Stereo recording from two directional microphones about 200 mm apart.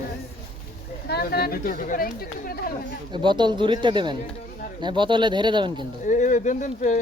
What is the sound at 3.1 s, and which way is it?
Speech, 25° right (ahead or behind).